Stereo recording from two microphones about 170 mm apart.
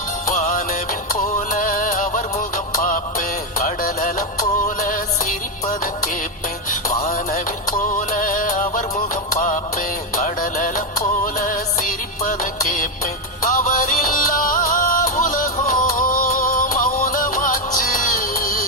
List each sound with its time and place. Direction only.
0.3 s music: 45° left (ahead or behind)
7.0 s music: 50° left (ahead or behind)